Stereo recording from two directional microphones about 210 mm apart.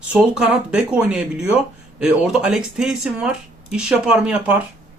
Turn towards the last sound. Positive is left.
turn(degrees=-5)  # may be behind; listen again after turning